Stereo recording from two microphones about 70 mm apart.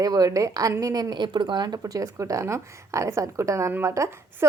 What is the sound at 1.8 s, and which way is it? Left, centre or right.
A woman's voice, right.